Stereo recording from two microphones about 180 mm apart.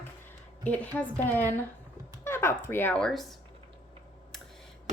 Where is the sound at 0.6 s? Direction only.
10° left (ahead or behind).